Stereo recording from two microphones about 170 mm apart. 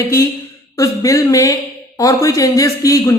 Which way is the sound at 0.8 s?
20° left (ahead or behind).